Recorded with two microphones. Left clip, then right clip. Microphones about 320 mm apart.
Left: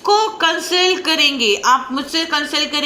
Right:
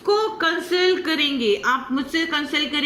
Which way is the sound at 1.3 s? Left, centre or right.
Left.